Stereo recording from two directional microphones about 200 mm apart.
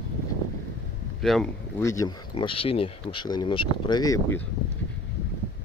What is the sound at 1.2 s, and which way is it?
Speech, centre (ahead or behind).